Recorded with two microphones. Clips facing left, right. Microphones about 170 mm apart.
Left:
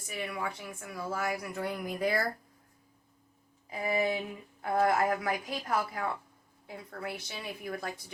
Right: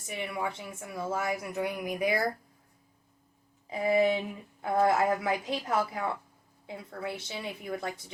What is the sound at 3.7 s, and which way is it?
Speech, 25° right (ahead or behind).